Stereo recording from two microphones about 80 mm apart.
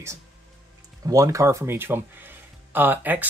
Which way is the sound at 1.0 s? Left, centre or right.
Right.